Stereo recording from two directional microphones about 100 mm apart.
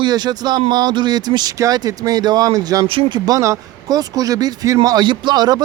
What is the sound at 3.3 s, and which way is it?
Speech, 30° right (ahead or behind).